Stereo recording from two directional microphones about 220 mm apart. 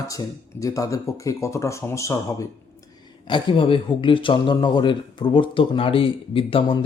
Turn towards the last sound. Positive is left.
turn(degrees=25)  # may be behind; listen again after turning